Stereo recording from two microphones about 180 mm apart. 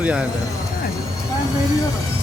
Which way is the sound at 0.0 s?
5° right (ahead or behind).